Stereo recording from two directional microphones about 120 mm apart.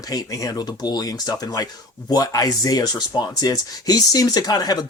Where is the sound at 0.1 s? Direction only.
30° left (ahead or behind).